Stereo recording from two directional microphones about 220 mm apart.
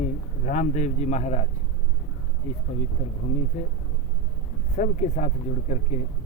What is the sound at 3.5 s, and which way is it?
Speech, 35° left (ahead or behind).